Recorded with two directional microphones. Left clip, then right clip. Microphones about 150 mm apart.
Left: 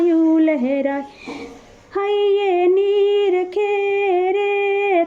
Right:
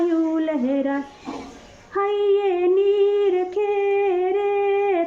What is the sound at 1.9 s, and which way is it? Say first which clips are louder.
Singing: left 2 dB; 35° left (ahead or behind).